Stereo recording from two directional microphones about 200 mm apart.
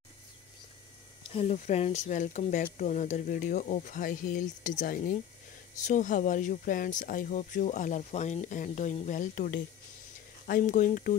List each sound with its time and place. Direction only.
1.3 s speech: 35° left (ahead or behind)